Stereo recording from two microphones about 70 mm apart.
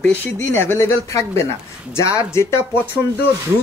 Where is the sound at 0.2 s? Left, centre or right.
Left.